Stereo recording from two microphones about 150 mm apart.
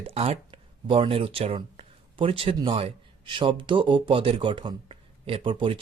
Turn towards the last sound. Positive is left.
turn(degrees=-35)  # may be behind; listen again after turning